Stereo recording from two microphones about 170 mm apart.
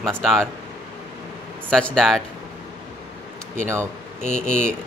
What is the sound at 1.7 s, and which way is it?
Speech, 5° left (ahead or behind).